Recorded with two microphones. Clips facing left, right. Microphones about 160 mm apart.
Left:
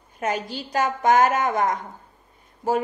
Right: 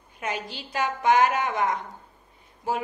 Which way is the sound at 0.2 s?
40° left (ahead or behind).